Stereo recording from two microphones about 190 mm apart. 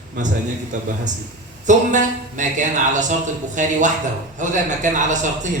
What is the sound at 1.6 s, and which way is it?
A man's voice, 40° right (ahead or behind).